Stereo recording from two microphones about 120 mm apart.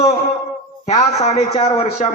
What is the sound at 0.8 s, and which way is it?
A man's voice, 65° left (ahead or behind).